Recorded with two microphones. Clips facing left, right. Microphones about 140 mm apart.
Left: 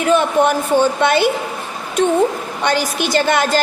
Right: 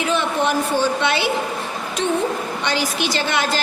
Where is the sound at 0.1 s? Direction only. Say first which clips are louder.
Left 8 dB; 50° left (ahead or behind).